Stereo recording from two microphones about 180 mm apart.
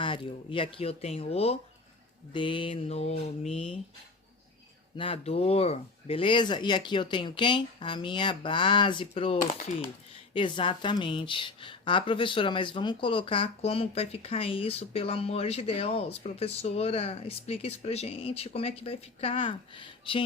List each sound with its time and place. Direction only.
0.0 s a woman's voice: 30° left (ahead or behind)
4.9 s speech: 30° left (ahead or behind)
9.4 s speech: 45° left (ahead or behind)
10.3 s a woman's voice: 25° left (ahead or behind)